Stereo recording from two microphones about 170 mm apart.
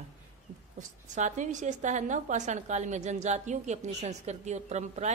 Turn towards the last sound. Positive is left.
turn(degrees=-40)  # may be behind; listen again after turning